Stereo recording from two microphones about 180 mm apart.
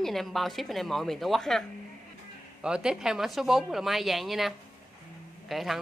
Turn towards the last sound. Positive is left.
turn(degrees=0)  # may be behind; listen again after turning